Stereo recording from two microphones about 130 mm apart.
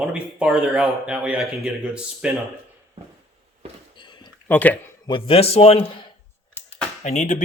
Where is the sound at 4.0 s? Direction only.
35° left (ahead or behind).